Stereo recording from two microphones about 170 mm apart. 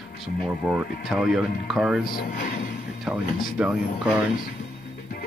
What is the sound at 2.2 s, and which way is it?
Speech, 55° left (ahead or behind).